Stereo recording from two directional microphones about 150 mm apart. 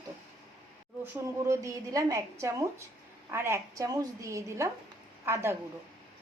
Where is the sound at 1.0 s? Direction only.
20° right (ahead or behind).